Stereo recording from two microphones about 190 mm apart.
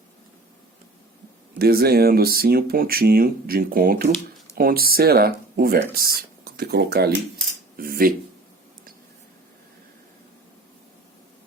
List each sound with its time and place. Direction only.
1.5 s speech: 55° right (ahead or behind)